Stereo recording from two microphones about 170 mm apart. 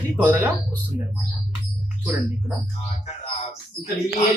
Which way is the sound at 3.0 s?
40° left (ahead or behind).